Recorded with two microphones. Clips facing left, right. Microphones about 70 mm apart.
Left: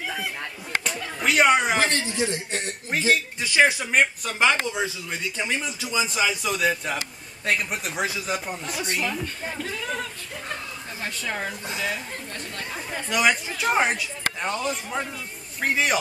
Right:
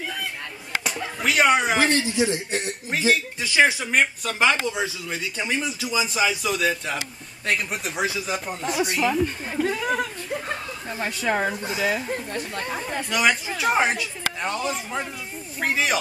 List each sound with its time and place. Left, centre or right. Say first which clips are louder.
1.2 s a man's voice: even; centre
9.0 s speech: right 6 dB; centre
11.2 s speech: right 8 dB; right
11.5 s a man's voice: right 5 dB; centre